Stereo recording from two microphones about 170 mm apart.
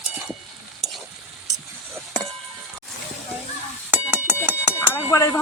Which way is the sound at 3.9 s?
10° right (ahead or behind).